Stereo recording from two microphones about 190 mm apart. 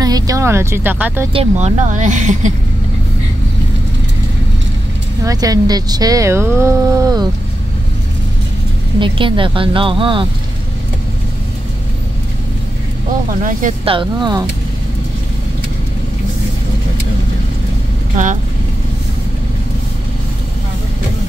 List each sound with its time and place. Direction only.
0.0 s speech: 20° right (ahead or behind)
1.3 s speech: 35° right (ahead or behind)
5.2 s speech: 20° right (ahead or behind)
9.0 s speech: 25° right (ahead or behind)
13.4 s speech: 45° right (ahead or behind)
13.8 s speech: 25° right (ahead or behind)
18.1 s speech: 40° right (ahead or behind)